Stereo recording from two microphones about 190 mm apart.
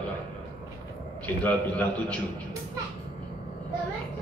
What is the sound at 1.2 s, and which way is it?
Speech, 10° left (ahead or behind).